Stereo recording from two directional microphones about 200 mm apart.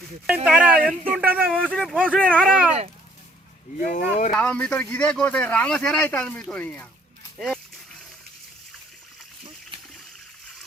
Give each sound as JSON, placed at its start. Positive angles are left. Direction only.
{"t": 0.3, "sound": "speech", "side_deg": -5}
{"t": 0.8, "sound": "speech", "side_deg": -45}
{"t": 1.1, "sound": "speech", "side_deg": -10}
{"t": 1.5, "sound": "speech", "side_deg": 5}
{"t": 2.5, "sound": "speech", "side_deg": -35}
{"t": 3.8, "sound": "speech", "side_deg": 40}
{"t": 4.3, "sound": "speech", "side_deg": 5}
{"t": 7.3, "sound": "a sound", "side_deg": 5}